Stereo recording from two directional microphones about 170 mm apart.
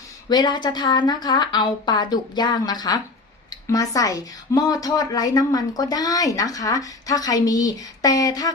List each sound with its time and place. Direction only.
0.3 s speech: 25° left (ahead or behind)